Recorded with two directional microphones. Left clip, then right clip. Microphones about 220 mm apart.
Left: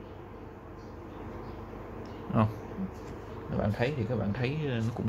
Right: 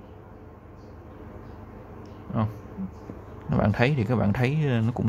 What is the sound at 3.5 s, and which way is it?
Speech, 35° right (ahead or behind).